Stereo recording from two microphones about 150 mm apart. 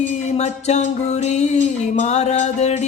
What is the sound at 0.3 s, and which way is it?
Music, 50° left (ahead or behind).